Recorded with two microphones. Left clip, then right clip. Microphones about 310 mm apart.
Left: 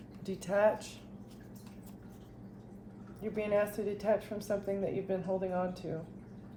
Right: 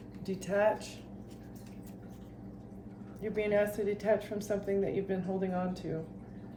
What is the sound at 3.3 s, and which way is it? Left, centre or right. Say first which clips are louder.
A woman's voice: right 2 dB; centre.